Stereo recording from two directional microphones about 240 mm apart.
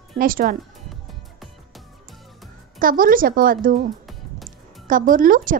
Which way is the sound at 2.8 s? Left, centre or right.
Right.